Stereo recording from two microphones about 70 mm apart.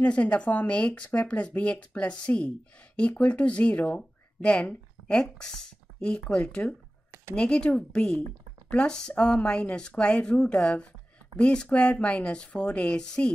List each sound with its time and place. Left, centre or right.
0.0 s speech: centre